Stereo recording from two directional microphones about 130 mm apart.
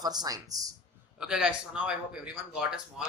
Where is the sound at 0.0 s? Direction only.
30° right (ahead or behind).